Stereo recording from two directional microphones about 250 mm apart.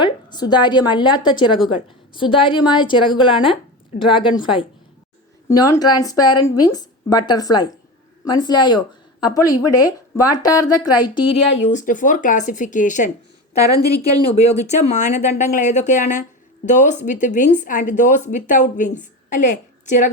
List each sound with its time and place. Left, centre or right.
0.0 s a woman's voice: centre
11.3 s speech: left
13.8 s speech: centre
14.3 s speech: left